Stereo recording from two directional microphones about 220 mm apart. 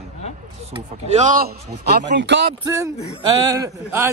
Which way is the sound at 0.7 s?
35° right (ahead or behind).